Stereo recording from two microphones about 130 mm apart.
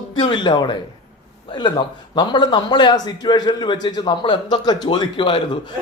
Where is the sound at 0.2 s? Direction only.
40° left (ahead or behind).